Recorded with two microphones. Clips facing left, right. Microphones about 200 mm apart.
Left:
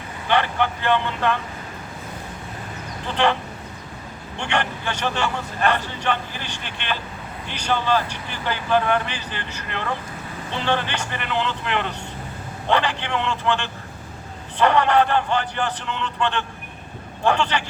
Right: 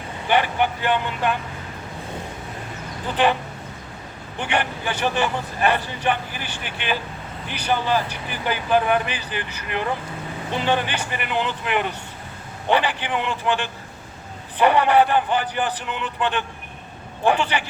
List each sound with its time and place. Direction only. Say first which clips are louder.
0.3 s a man's voice: right 1 dB; 15° right (ahead or behind)
4.4 s a man's voice: right 1 dB; 10° right (ahead or behind)